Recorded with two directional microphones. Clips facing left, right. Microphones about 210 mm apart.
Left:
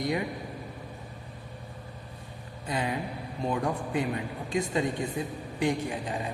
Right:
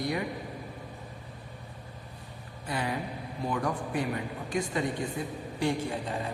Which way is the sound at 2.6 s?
20° left (ahead or behind).